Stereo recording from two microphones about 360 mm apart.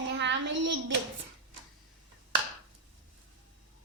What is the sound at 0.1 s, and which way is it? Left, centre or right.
Child singing, right.